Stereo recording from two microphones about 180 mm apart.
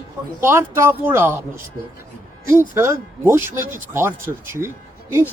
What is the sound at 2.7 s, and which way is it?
Speech, 15° right (ahead or behind).